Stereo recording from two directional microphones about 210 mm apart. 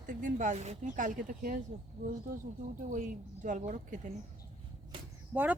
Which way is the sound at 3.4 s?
35° right (ahead or behind).